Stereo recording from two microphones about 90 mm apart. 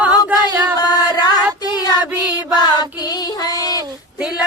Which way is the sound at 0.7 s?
45° left (ahead or behind).